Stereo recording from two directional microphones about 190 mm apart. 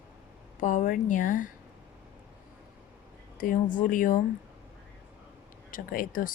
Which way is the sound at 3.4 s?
45° left (ahead or behind).